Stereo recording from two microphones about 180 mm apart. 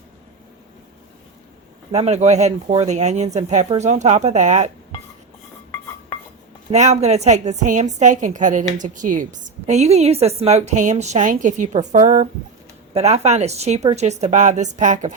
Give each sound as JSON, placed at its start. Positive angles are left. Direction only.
{"t": 1.9, "sound": "speech", "side_deg": -35}
{"t": 6.7, "sound": "a woman's voice", "side_deg": -40}